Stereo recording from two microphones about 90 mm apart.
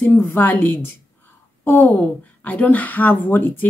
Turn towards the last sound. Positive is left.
turn(degrees=20)  # may be behind; listen again after turning